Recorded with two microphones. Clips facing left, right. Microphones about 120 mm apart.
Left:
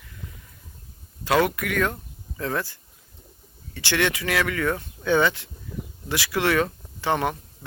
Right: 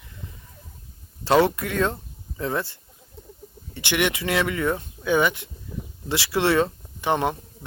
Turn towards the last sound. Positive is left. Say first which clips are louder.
# right 1 dB
turn(degrees=-20)  # may be behind; listen again after turning